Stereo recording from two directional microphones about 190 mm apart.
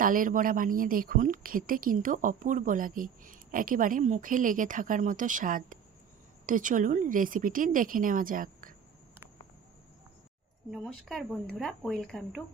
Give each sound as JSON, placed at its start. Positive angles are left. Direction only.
{"t": 0.0, "sound": "a woman's voice", "side_deg": -45}
{"t": 10.7, "sound": "speech", "side_deg": 0}